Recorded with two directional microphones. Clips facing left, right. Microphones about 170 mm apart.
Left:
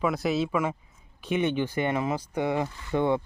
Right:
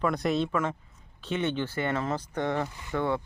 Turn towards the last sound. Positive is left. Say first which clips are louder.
# left 4 dB
turn(degrees=20)  # may be behind; listen again after turning